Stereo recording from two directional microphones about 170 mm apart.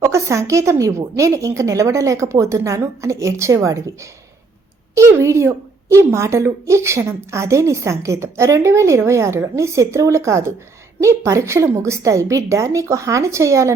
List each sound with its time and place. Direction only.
0.0 s a woman's voice: 15° right (ahead or behind)